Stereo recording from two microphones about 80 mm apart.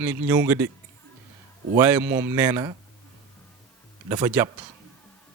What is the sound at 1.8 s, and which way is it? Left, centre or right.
Speech, right.